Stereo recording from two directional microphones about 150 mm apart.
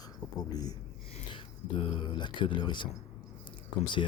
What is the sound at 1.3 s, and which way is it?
Speech, 35° left (ahead or behind).